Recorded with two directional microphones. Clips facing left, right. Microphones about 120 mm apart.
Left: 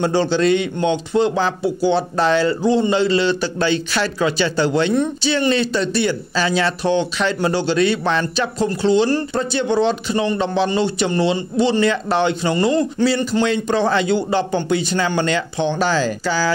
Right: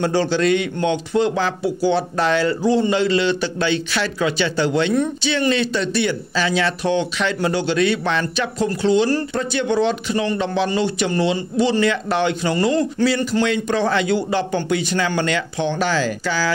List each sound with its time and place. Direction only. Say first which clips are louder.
0.0 s speech: left 1 dB; 25° left (ahead or behind)